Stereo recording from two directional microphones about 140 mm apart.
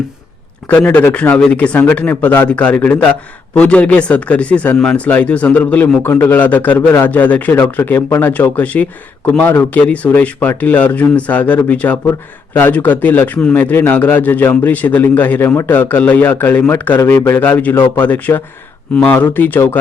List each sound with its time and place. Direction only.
0.7 s a man's voice: 10° left (ahead or behind)